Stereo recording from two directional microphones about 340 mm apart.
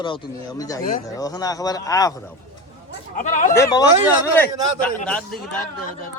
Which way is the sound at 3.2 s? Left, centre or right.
Left.